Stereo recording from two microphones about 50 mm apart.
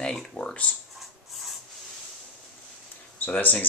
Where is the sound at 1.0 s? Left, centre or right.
Centre.